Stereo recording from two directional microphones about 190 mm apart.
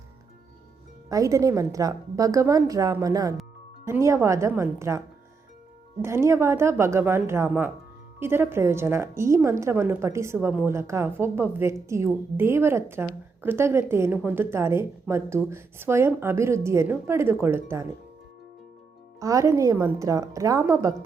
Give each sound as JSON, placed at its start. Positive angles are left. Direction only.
{"t": 1.1, "sound": "a woman's voice", "side_deg": -15}
{"t": 19.2, "sound": "a woman's voice", "side_deg": -15}